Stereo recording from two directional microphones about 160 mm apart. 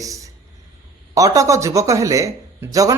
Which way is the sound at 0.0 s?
20° right (ahead or behind).